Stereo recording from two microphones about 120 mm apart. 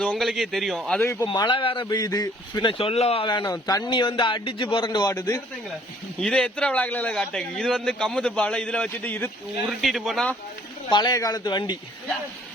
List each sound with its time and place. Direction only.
0.2 s speech: centre (ahead or behind)
1.0 s speech: 20° left (ahead or behind)
1.3 s speech: 45° left (ahead or behind)
1.9 s speech: 30° left (ahead or behind); by 3.2 s 55° left (ahead or behind)
3.4 s a man's voice: 30° left (ahead or behind)
3.8 s a man's voice: 40° left (ahead or behind)
6.1 s a man's voice: 5° left (ahead or behind)
9.8 s speech: centre (ahead or behind)
10.9 s a man's voice: 35° left (ahead or behind)